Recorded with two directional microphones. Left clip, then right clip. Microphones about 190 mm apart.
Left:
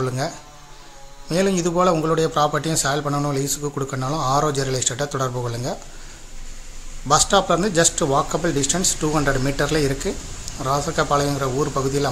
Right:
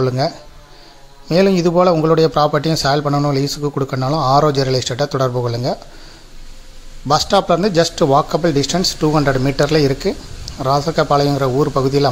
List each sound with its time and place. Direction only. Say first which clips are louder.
0.0 s a man's voice: right 7 dB; 35° right (ahead or behind)
1.3 s a man's voice: right 7 dB; 35° right (ahead or behind)
7.1 s a man's voice: right 3 dB; 35° right (ahead or behind)